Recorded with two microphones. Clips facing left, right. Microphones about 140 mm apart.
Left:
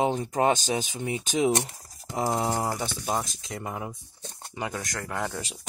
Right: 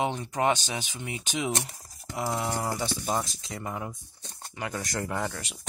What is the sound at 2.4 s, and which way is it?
Speech, 25° left (ahead or behind).